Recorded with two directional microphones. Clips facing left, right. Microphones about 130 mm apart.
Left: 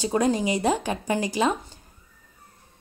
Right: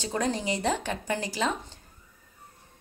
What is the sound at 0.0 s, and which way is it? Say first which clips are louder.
A woman's voice: left 6 dB; 10° left (ahead or behind).